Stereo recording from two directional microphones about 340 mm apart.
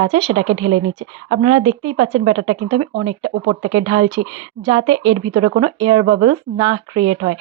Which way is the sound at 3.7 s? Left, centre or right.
Centre.